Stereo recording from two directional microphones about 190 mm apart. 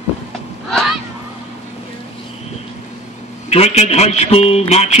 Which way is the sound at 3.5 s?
35° left (ahead or behind).